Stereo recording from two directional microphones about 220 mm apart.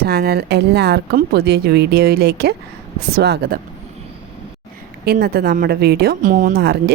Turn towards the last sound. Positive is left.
turn(degrees=-45)  # may be behind; listen again after turning